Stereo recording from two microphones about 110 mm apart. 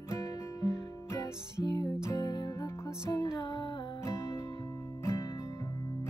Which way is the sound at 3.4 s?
45° left (ahead or behind).